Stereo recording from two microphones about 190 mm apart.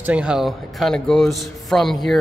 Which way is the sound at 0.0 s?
5° right (ahead or behind).